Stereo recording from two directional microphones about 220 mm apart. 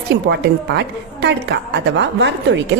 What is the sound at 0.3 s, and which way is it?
Speech, 50° right (ahead or behind).